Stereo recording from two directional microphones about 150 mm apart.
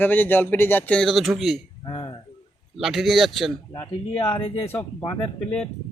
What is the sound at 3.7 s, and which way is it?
Speech, 35° left (ahead or behind).